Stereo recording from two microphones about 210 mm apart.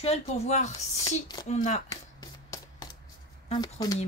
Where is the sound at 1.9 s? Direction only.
15° left (ahead or behind).